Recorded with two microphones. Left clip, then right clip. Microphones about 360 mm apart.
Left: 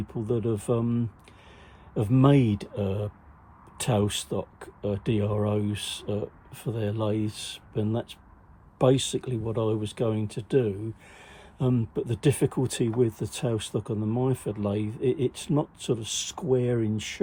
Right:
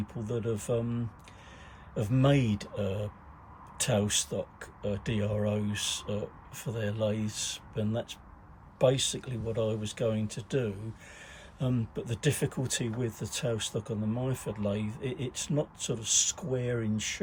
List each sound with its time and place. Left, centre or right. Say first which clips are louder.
0.1 s speech: left 6 dB; centre